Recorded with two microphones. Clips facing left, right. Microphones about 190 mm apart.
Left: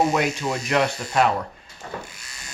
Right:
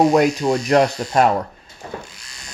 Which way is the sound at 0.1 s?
40° right (ahead or behind).